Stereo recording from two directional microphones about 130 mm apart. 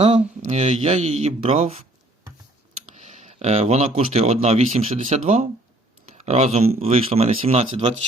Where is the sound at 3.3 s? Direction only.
55° right (ahead or behind).